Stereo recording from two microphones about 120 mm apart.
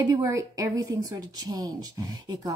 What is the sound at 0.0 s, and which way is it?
Speech, 25° right (ahead or behind).